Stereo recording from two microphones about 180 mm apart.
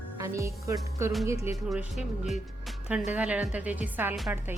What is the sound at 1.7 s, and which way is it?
A woman's voice, centre (ahead or behind).